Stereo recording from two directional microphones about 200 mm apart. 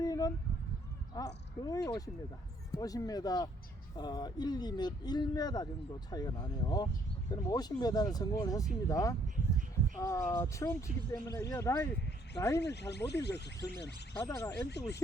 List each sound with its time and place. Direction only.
0.0 s a sound: 15° left (ahead or behind)
1.2 s speech: 15° left (ahead or behind)
12.6 s speech: 55° left (ahead or behind)
14.2 s speech: 15° left (ahead or behind)